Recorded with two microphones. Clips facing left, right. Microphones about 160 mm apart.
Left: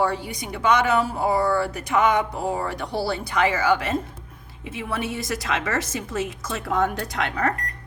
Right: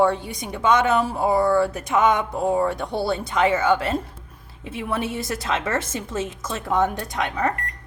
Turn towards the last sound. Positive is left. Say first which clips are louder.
# right 1 dB
turn(degrees=-20)  # may be behind; listen again after turning